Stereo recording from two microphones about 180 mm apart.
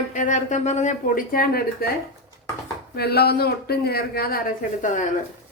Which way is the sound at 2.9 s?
60° left (ahead or behind).